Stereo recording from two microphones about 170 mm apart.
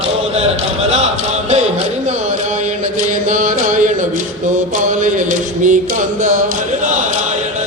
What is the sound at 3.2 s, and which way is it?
Mantra, 50° right (ahead or behind).